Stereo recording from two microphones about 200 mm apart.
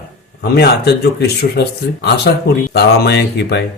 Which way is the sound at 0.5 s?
55° left (ahead or behind).